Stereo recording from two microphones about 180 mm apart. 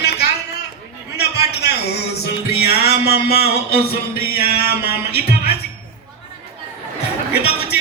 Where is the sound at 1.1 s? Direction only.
65° left (ahead or behind).